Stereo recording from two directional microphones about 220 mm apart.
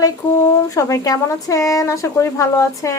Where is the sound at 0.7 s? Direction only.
15° left (ahead or behind).